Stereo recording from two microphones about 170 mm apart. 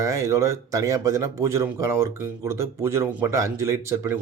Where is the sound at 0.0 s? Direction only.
20° right (ahead or behind).